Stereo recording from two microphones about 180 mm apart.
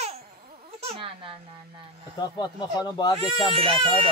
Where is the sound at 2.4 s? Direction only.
25° left (ahead or behind).